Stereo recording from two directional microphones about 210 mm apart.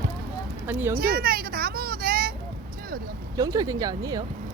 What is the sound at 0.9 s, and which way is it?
Children playing, 45° right (ahead or behind).